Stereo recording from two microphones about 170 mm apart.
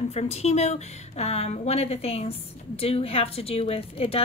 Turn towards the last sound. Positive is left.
turn(degrees=35)  # may be behind; listen again after turning